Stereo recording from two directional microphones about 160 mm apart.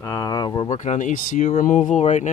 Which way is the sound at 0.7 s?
50° left (ahead or behind).